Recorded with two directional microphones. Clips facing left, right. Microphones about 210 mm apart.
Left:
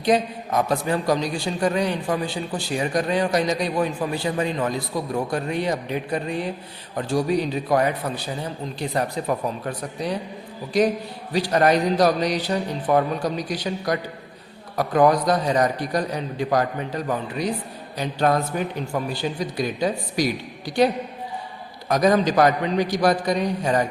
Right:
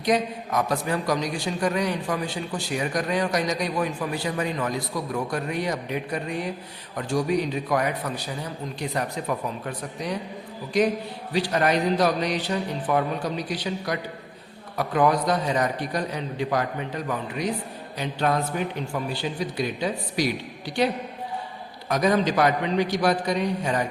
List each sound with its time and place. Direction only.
0.0 s a man's voice: 30° left (ahead or behind)
11.3 s a man's voice: 40° left (ahead or behind)
21.8 s a man's voice: 40° left (ahead or behind)